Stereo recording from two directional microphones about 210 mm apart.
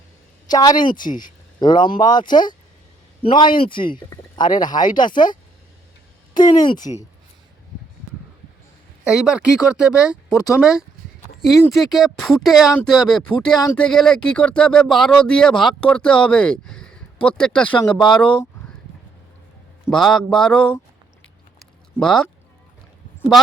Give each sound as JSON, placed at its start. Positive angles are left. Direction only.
{"t": 0.4, "sound": "speech", "side_deg": 20}
{"t": 9.0, "sound": "speech", "side_deg": -5}
{"t": 19.9, "sound": "speech", "side_deg": 0}
{"t": 21.9, "sound": "speech", "side_deg": 5}